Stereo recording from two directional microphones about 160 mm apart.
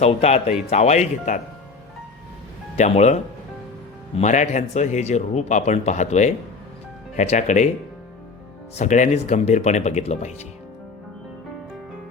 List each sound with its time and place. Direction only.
0.0 s speech: 40° left (ahead or behind)
2.7 s speech: 45° left (ahead or behind)
8.7 s speech: 50° left (ahead or behind)